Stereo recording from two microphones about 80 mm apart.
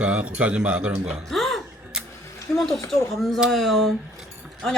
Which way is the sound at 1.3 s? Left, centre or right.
Centre.